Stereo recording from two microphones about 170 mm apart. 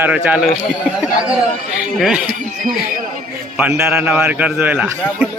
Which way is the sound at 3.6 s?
5° right (ahead or behind).